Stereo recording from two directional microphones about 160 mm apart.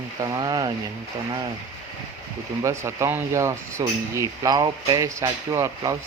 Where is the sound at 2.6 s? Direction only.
15° right (ahead or behind).